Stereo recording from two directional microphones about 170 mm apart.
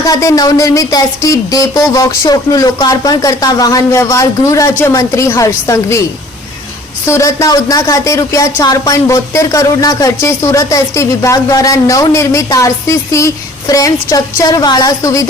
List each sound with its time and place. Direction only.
0.0 s speech: 20° left (ahead or behind)
7.0 s speech: 20° left (ahead or behind)